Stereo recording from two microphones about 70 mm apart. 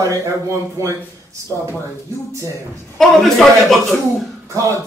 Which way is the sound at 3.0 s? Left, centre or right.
Centre.